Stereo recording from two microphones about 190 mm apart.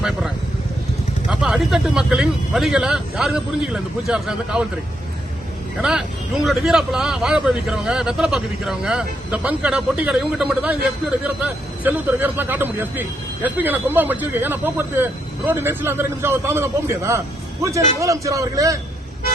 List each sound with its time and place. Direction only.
1.3 s a man's voice: 5° right (ahead or behind)
5.8 s a man's voice: 5° right (ahead or behind)